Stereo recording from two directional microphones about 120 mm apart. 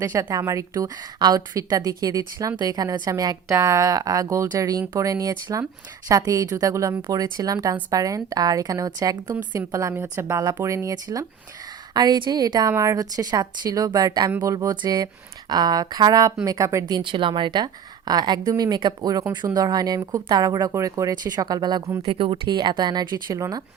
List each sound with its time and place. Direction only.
0.0 s a woman's voice: 30° right (ahead or behind)
17.0 s a woman's voice: 45° right (ahead or behind)
22.0 s a woman's voice: 50° right (ahead or behind); by 23.6 s 30° right (ahead or behind)